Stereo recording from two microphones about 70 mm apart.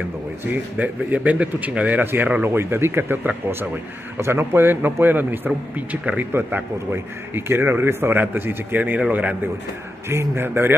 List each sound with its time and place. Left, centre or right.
0.5 s a man's voice: right
2.5 s a man's voice: right
10.0 s a man's voice: right